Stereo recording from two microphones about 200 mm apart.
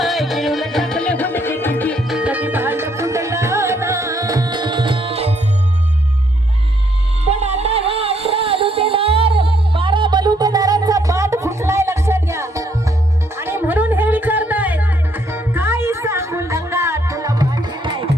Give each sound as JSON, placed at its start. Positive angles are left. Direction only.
{"t": 0.0, "sound": "music", "side_deg": 0}
{"t": 7.3, "sound": "music", "side_deg": -30}